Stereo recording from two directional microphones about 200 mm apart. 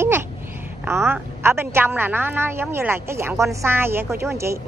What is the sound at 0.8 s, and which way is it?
Speech, 10° right (ahead or behind).